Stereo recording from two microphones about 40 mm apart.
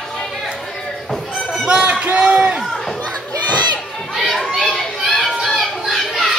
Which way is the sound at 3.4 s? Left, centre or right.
Left.